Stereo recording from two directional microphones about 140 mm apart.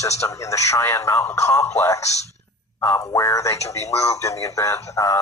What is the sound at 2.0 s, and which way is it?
Speech, 50° left (ahead or behind).